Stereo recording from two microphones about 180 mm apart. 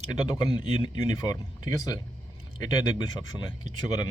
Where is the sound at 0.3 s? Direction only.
25° left (ahead or behind).